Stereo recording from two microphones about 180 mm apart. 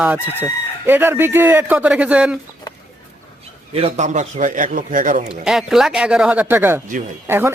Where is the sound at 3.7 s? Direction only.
35° right (ahead or behind).